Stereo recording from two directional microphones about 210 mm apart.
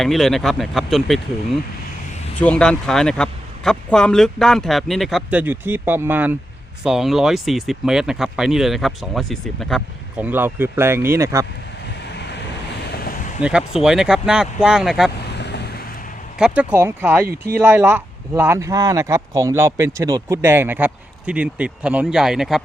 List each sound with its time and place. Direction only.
0.0 s speech: centre (ahead or behind)
12.9 s a sound: 45° left (ahead or behind)
13.4 s speech: 5° right (ahead or behind)
15.4 s vehicle: 55° left (ahead or behind)
16.4 s speech: 5° right (ahead or behind)